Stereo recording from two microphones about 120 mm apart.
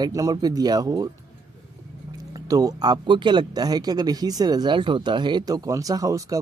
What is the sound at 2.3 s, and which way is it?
Speech, 30° right (ahead or behind).